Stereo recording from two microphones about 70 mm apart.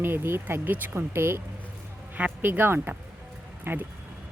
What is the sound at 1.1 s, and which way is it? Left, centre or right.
Speech, right.